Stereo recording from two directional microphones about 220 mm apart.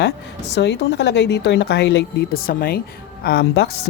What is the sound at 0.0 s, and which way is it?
Speech, 50° left (ahead or behind).